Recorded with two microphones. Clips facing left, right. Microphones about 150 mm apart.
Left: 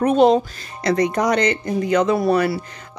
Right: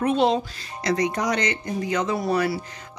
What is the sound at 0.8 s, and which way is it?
Speech, 55° left (ahead or behind).